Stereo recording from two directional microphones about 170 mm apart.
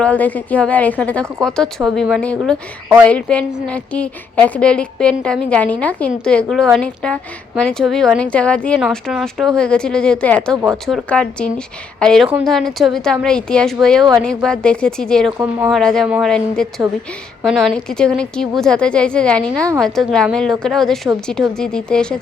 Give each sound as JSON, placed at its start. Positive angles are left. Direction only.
{"t": 0.0, "sound": "a woman's voice", "side_deg": 10}